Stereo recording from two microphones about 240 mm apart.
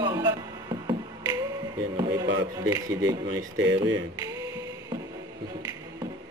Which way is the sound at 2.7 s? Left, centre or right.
Centre.